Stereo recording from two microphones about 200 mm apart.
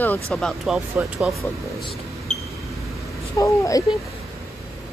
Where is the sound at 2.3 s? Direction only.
35° left (ahead or behind).